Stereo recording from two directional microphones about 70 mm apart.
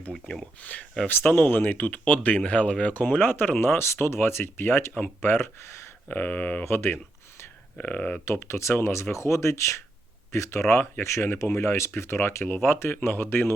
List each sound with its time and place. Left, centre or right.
0.6 s speech: left
6.7 s a sound: left
7.8 s speech: left
8.2 s speech: left